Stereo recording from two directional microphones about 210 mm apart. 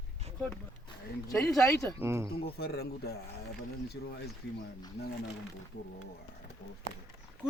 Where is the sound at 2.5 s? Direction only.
50° left (ahead or behind).